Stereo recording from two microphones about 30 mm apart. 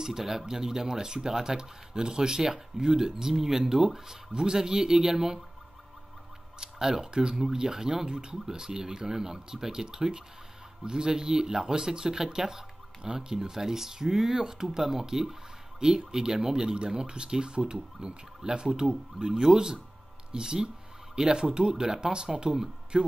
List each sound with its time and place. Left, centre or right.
0.0 s speech: centre
6.6 s speech: centre